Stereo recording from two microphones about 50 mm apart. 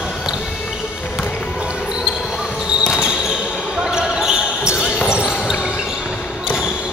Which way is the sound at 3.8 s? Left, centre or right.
Centre.